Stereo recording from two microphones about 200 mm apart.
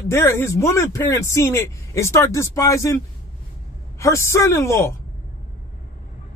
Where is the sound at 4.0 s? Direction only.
15° left (ahead or behind).